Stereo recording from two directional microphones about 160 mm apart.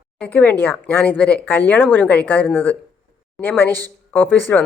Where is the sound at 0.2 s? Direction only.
10° left (ahead or behind).